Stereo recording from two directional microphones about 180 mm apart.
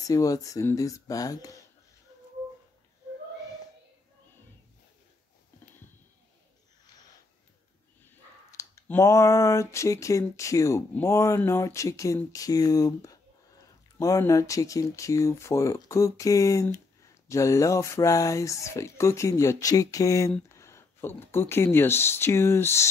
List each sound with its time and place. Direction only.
0.0 s speech: 20° left (ahead or behind)
8.5 s speech: 15° left (ahead or behind)